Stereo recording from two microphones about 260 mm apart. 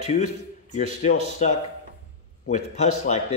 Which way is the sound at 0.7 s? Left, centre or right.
Left.